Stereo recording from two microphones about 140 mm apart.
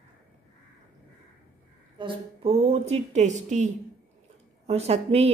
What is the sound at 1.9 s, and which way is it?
A woman's voice, 35° right (ahead or behind).